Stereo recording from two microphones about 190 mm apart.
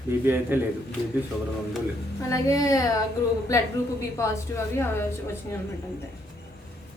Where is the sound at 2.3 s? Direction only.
15° left (ahead or behind).